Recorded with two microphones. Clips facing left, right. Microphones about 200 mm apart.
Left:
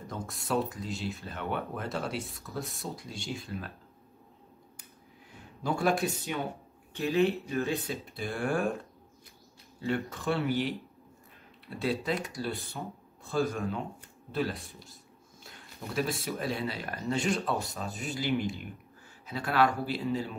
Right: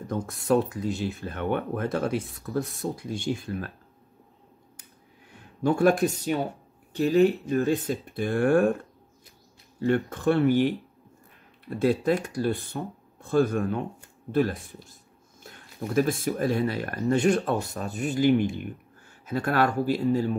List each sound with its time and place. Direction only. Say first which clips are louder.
0.1 s speech: right 8 dB; 55° right (ahead or behind)
5.6 s speech: right 7 dB; 50° right (ahead or behind)
11.7 s speech: right 8 dB; 50° right (ahead or behind)